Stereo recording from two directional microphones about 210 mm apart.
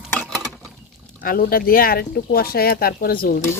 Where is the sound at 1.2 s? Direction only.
45° left (ahead or behind).